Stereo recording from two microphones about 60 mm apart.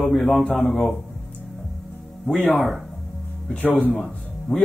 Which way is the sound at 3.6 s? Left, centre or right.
Left.